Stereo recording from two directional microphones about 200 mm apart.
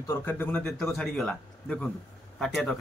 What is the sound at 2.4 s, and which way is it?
Child singing, 5° left (ahead or behind).